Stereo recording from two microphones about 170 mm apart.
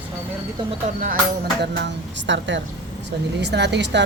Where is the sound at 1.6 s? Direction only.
85° right.